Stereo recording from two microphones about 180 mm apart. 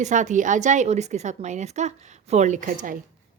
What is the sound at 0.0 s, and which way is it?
A woman's voice, 45° right (ahead or behind).